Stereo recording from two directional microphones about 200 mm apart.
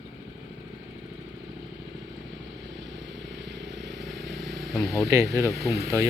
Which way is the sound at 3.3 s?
60° right (ahead or behind).